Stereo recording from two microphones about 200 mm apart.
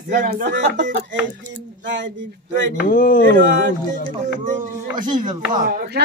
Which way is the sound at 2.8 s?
45° left (ahead or behind).